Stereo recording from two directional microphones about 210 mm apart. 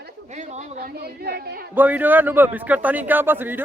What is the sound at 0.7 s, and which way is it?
Speech, 50° right (ahead or behind).